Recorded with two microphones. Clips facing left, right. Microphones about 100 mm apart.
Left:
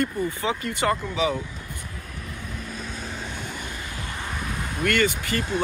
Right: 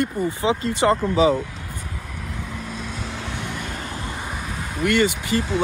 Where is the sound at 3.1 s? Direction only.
80° right; by 3.9 s 55° right (ahead or behind).